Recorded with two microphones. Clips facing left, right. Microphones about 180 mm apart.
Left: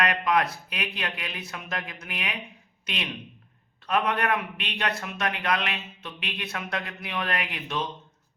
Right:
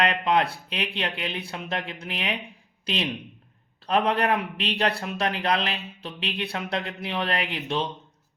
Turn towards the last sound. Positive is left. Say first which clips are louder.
# right 3 dB
turn(degrees=-30)  # may be behind; listen again after turning